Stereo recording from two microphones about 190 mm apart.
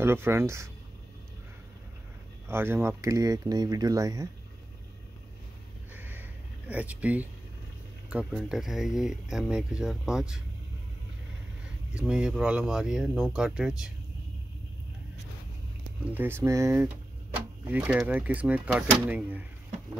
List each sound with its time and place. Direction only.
0.0 s speech: 10° right (ahead or behind)
2.4 s speech: 10° right (ahead or behind)
5.9 s a sound: 10° right (ahead or behind)
6.7 s speech: 5° right (ahead or behind)
11.9 s speech: 5° right (ahead or behind)
16.2 s speech: 15° right (ahead or behind)